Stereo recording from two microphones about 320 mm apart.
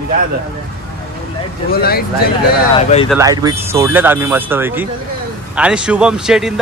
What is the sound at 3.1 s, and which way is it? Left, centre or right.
A man's voice, centre.